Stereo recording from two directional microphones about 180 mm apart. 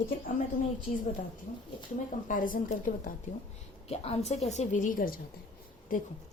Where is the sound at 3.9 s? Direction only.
35° left (ahead or behind).